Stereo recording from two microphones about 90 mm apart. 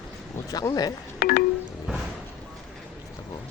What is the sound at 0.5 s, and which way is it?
Speech, 45° left (ahead or behind).